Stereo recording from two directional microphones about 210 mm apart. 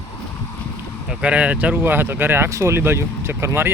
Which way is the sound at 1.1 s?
5° right (ahead or behind).